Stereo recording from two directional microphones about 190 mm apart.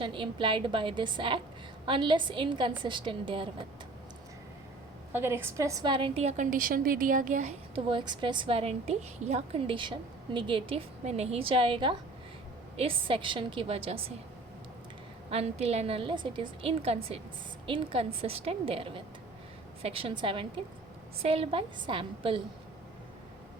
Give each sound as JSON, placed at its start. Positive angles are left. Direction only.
{"t": 0.0, "sound": "a woman's voice", "side_deg": -25}
{"t": 5.1, "sound": "a woman's voice", "side_deg": -10}
{"t": 7.9, "sound": "a woman's voice", "side_deg": -25}
{"t": 15.3, "sound": "a woman's voice", "side_deg": -35}